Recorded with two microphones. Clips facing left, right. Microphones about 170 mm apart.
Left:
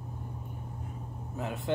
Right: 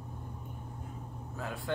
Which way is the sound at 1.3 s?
20° left (ahead or behind).